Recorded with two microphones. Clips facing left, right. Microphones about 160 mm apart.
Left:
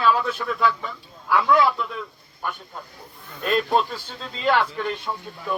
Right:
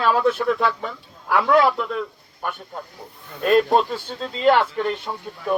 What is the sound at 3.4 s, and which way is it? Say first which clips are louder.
A man's voice: right 5 dB; 40° right (ahead or behind).